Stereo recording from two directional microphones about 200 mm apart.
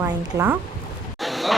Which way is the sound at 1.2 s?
Centre (ahead or behind).